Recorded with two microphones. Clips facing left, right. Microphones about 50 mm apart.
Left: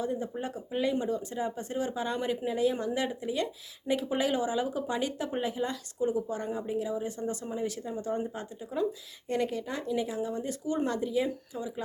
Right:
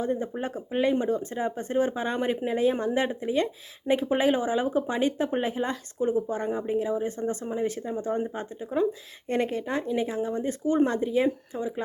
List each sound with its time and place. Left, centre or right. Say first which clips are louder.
0.0 s speech: right 4 dB; right